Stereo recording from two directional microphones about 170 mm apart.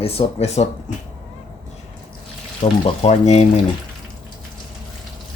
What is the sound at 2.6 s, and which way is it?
Speech, 35° left (ahead or behind).